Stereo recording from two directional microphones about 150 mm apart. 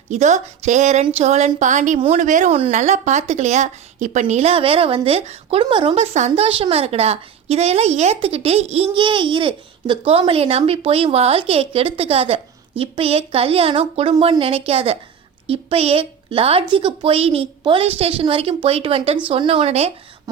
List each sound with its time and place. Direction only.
0.1 s a woman's voice: 50° right (ahead or behind)
20.3 s throat clearing: 25° right (ahead or behind)